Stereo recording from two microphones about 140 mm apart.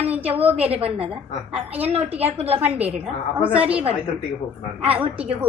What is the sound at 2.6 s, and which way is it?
A woman's voice, 10° right (ahead or behind).